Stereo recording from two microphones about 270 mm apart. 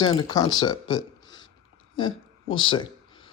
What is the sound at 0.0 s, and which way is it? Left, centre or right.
Speech, centre.